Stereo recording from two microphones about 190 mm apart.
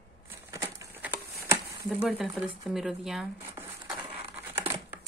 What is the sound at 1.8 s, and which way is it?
Speech, centre (ahead or behind).